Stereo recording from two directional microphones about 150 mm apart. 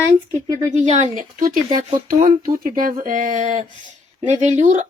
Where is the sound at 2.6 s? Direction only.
70° right (ahead or behind).